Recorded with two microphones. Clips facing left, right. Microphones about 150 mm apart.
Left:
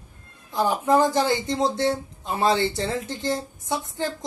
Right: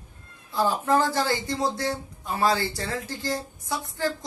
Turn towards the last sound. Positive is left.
turn(degrees=20)  # may be behind; listen again after turning